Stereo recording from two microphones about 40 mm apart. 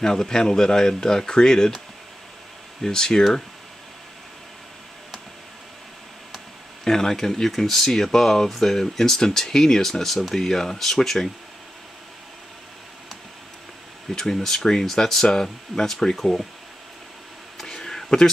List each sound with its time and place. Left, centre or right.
0.0 s speech: centre
2.8 s speech: centre
6.8 s speech: centre
14.0 s speech: centre
17.6 s a sound: centre